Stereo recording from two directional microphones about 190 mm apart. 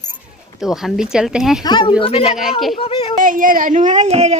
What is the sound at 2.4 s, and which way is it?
Speech, centre (ahead or behind).